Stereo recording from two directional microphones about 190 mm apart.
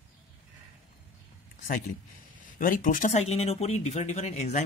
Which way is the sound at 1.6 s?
45° left (ahead or behind).